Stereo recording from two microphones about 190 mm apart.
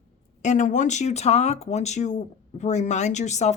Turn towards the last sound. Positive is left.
turn(degrees=35)  # may be behind; listen again after turning